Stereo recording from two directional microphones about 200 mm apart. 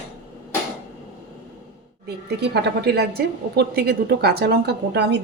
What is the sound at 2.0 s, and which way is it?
A woman's voice, 55° right (ahead or behind).